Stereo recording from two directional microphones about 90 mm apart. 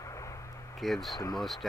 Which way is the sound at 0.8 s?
Centre (ahead or behind).